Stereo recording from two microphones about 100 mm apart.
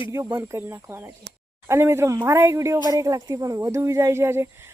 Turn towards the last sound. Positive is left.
turn(degrees=-25)  # may be behind; listen again after turning